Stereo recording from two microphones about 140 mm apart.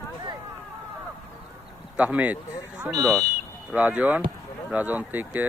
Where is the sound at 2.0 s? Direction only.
10° right (ahead or behind).